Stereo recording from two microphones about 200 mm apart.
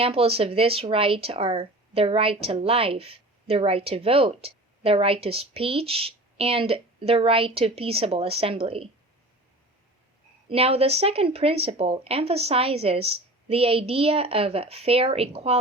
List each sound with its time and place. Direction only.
0.0 s speech: 30° right (ahead or behind)
10.5 s speech: 30° right (ahead or behind)